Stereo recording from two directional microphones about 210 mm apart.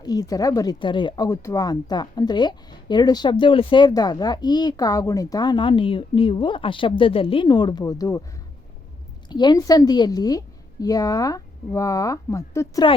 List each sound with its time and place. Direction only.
0.0 s speech: 15° left (ahead or behind)
9.3 s a woman's voice: 20° left (ahead or behind)